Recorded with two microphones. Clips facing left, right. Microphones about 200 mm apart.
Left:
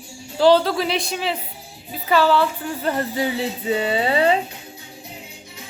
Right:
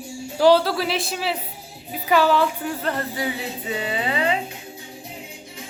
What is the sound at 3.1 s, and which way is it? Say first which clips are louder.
Speech: left 4 dB; 25° left (ahead or behind).